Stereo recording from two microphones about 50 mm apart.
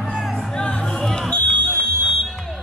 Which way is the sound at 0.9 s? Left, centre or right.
Centre.